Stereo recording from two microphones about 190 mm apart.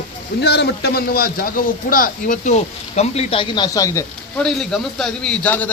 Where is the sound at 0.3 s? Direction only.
60° left (ahead or behind); by 4.0 s 15° left (ahead or behind).